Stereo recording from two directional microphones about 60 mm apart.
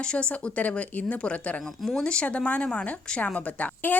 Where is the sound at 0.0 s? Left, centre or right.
Centre.